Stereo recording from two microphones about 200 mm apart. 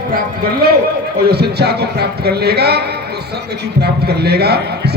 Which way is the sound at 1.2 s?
55° right (ahead or behind).